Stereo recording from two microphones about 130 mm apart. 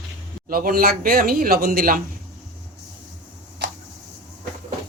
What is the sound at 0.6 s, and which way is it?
Speech, 90° right.